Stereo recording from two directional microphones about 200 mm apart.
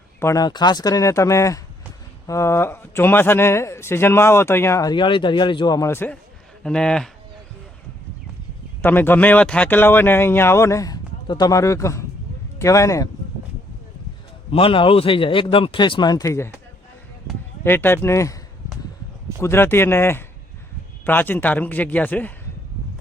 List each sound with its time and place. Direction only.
0.2 s speech: 15° left (ahead or behind)
8.8 s speech: 10° left (ahead or behind)
14.5 s speech: 25° left (ahead or behind)
17.6 s speech: 10° left (ahead or behind)
19.4 s speech: 10° left (ahead or behind)